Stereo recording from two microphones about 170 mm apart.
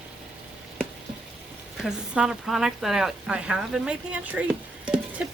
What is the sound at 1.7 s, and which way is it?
Speech, 5° right (ahead or behind).